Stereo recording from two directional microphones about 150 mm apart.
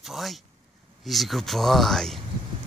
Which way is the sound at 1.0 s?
Centre (ahead or behind).